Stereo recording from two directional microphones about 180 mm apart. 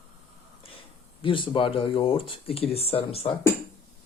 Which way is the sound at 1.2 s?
30° left (ahead or behind).